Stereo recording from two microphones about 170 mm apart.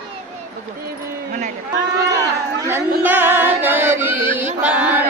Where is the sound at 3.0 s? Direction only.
10° right (ahead or behind).